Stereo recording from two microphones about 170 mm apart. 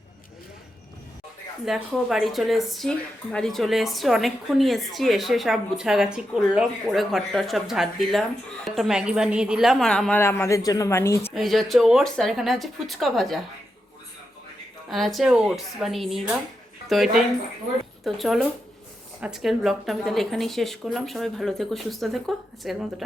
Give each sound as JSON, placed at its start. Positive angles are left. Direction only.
{"t": 1.6, "sound": "a woman's voice", "side_deg": 0}
{"t": 11.3, "sound": "a woman's voice", "side_deg": 0}
{"t": 14.8, "sound": "a woman's voice", "side_deg": 0}